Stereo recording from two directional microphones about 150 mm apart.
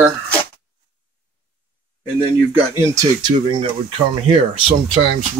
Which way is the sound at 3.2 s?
35° right (ahead or behind).